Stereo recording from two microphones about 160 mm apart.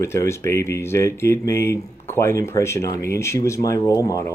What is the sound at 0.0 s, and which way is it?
Speech, 15° left (ahead or behind).